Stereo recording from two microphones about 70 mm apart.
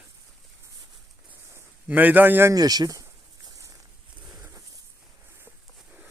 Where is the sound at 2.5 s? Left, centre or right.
Right.